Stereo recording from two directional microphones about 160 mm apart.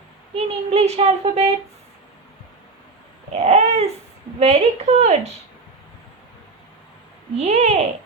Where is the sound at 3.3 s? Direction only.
45° right (ahead or behind).